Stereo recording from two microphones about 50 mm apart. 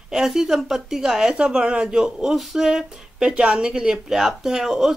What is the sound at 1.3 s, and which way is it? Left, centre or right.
Speech, right.